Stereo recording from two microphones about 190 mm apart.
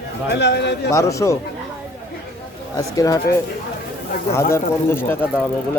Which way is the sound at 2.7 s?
15° left (ahead or behind).